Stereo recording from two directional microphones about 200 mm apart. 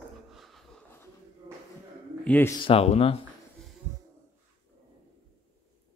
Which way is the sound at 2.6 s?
30° left (ahead or behind).